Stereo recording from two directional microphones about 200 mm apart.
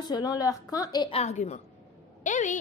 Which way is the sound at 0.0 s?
20° left (ahead or behind).